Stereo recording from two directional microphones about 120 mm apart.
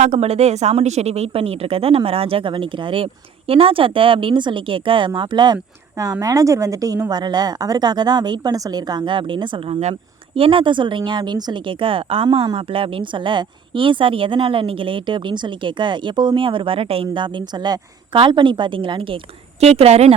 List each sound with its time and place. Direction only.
0.0 s a woman's voice: 65° right (ahead or behind)